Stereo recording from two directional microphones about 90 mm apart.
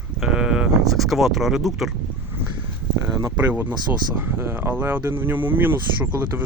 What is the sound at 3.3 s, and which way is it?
Speech, 15° right (ahead or behind).